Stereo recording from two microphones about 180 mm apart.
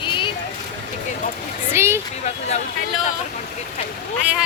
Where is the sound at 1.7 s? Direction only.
15° right (ahead or behind).